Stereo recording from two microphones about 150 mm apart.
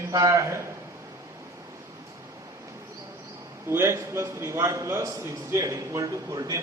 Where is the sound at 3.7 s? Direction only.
20° right (ahead or behind).